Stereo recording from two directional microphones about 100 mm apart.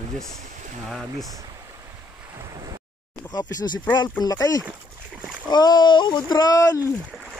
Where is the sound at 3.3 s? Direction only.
45° left (ahead or behind).